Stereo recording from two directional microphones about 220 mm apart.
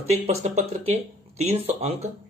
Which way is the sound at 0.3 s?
30° right (ahead or behind).